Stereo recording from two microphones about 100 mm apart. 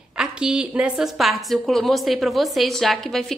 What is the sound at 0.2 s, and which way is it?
A woman's voice, 10° right (ahead or behind).